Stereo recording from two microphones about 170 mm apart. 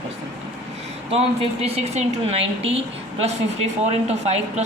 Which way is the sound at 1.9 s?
35° right (ahead or behind).